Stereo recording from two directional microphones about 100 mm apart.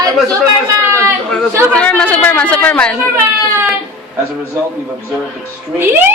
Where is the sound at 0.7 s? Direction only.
25° right (ahead or behind).